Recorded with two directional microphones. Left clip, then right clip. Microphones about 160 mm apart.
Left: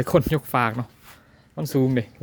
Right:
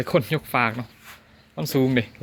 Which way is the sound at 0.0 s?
45° left (ahead or behind).